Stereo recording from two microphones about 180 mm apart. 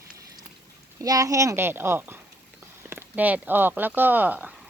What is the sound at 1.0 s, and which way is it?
Speech, 20° right (ahead or behind).